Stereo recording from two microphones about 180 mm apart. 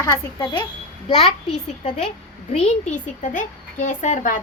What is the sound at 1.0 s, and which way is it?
Speech, 35° left (ahead or behind).